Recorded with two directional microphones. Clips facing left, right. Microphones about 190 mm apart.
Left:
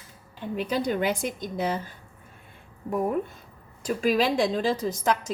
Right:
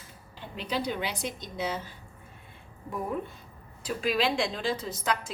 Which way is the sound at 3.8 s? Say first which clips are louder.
Left 5 dB; 45° left (ahead or behind).